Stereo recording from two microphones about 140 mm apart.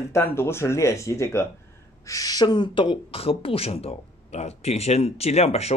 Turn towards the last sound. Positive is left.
turn(degrees=50)  # may be behind; listen again after turning